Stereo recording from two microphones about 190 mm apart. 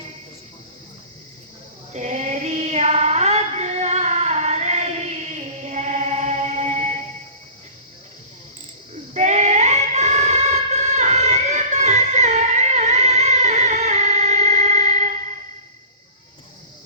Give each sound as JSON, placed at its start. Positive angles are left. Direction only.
{"t": 1.9, "sound": "female singing", "side_deg": -40}
{"t": 9.1, "sound": "female singing", "side_deg": -40}